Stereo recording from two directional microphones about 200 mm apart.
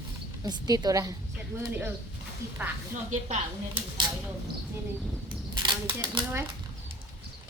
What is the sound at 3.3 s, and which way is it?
Speech, 25° right (ahead or behind).